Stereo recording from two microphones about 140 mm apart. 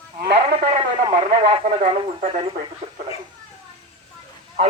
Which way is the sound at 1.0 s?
35° right (ahead or behind).